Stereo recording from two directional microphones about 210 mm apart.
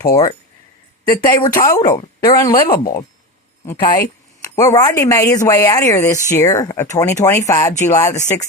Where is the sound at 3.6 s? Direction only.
20° left (ahead or behind).